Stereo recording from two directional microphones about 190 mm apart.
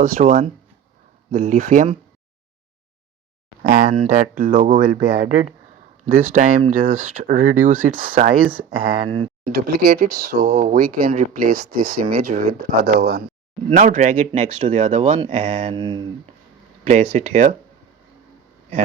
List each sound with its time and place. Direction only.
0.2 s speech: 30° right (ahead or behind)
3.6 s speech: 50° right (ahead or behind)
8.8 s speech: 30° right (ahead or behind)
9.5 s speech: 55° right (ahead or behind)
13.7 s speech: 45° right (ahead or behind)
15.7 s speech: 25° right (ahead or behind)
16.8 s speech: 45° right (ahead or behind)